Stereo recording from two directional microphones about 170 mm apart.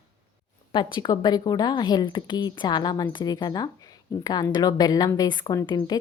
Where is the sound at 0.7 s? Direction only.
25° left (ahead or behind).